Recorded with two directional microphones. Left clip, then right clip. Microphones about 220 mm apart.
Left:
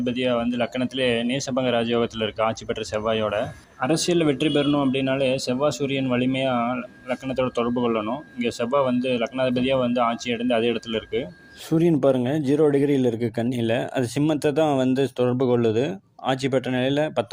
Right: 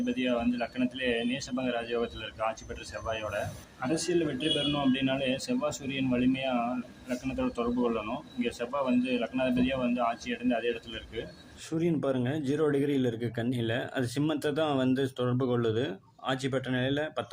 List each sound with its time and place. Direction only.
0.0 s speech: 30° left (ahead or behind)